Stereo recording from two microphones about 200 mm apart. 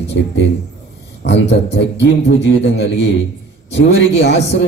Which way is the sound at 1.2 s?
60° left (ahead or behind).